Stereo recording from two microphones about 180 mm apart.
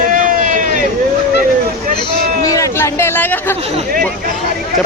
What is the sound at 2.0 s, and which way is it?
Chatter, 20° left (ahead or behind).